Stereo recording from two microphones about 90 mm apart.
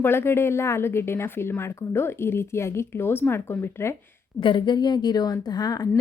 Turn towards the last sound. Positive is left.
turn(degrees=45)  # may be behind; listen again after turning